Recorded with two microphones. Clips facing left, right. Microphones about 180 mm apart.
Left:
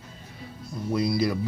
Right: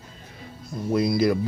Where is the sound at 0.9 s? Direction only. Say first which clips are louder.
Right 4 dB; 50° right (ahead or behind).